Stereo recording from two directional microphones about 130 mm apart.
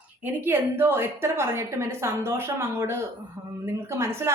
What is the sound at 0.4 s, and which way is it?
A woman's voice, 20° right (ahead or behind).